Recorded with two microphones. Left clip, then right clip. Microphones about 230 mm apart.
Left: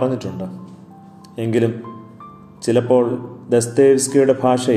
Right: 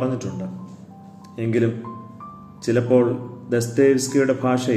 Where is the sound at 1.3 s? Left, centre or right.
Centre.